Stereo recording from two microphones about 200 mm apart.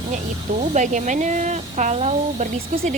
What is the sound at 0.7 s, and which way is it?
Speech, 35° right (ahead or behind).